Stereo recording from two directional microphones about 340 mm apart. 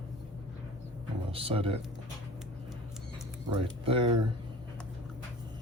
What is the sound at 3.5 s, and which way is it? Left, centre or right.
Speech, centre.